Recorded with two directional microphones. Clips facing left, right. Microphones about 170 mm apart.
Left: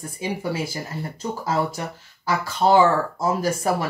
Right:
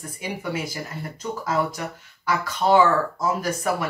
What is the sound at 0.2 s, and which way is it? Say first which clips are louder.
Speech: left 3 dB; 30° left (ahead or behind).